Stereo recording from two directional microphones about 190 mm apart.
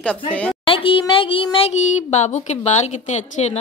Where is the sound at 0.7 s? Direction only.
30° left (ahead or behind).